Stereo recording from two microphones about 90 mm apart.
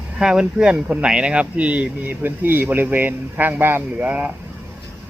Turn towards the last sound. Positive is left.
turn(degrees=-20)  # may be behind; listen again after turning